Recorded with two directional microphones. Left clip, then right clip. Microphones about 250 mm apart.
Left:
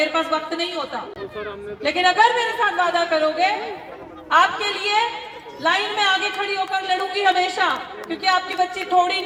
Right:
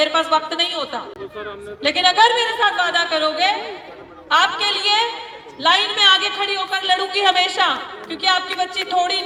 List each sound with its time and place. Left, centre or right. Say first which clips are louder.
0.0 s a woman's voice: right 4 dB; right